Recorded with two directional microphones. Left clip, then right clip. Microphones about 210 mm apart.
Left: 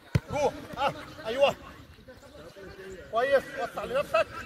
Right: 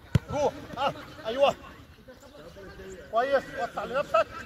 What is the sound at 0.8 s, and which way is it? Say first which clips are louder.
Speech: even; 40° left (ahead or behind).